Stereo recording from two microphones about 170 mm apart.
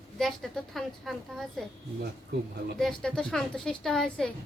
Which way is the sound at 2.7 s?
5° left (ahead or behind).